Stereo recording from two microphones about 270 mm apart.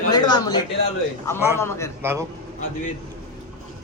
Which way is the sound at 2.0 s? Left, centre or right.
Centre.